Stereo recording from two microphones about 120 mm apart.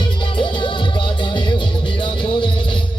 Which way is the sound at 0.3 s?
45° left (ahead or behind).